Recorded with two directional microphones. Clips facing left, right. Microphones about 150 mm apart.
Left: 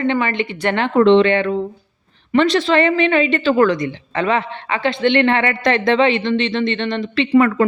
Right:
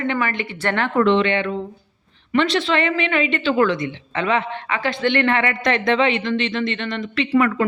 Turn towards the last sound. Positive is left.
turn(degrees=40)  # may be behind; listen again after turning